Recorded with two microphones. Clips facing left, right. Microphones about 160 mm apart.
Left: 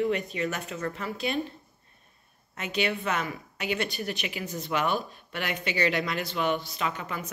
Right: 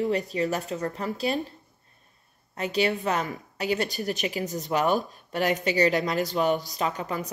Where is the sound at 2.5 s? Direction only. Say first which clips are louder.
Right 4 dB; 35° right (ahead or behind).